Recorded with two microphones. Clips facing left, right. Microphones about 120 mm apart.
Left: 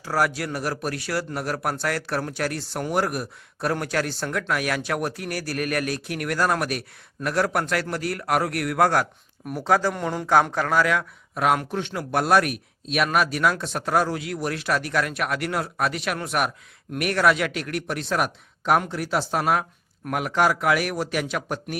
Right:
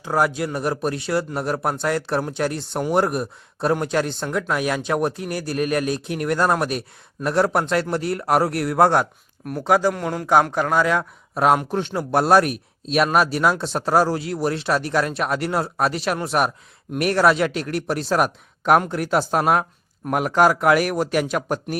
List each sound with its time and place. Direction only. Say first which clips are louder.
0.0 s speech: right 3 dB; 20° right (ahead or behind)
9.6 s speech: right 3 dB; 15° right (ahead or behind)
9.9 s speech: right 2 dB; centre (ahead or behind)
10.5 s speech: right 2 dB; 15° right (ahead or behind)
10.9 s speech: right 3 dB; 35° right (ahead or behind)
18.6 s a man's voice: right 4 dB; 55° right (ahead or behind)